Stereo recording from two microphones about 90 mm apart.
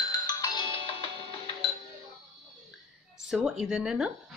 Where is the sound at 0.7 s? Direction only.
90° left.